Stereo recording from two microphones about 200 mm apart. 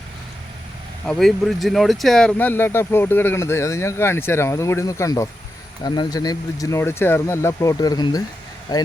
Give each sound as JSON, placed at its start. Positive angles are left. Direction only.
{"t": 1.0, "sound": "speech", "side_deg": 0}